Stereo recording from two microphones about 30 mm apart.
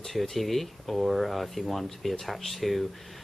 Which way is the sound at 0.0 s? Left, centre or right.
Centre.